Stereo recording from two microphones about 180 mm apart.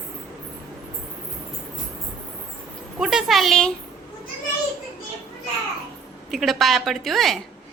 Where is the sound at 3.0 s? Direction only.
Centre (ahead or behind).